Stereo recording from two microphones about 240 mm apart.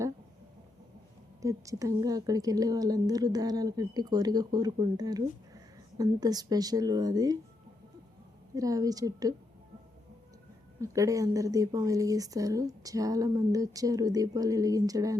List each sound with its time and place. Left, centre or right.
1.4 s speech: centre
8.5 s speech: centre
10.8 s speech: centre